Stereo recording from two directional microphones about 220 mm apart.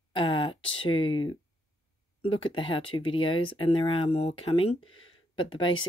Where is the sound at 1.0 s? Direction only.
65° left (ahead or behind).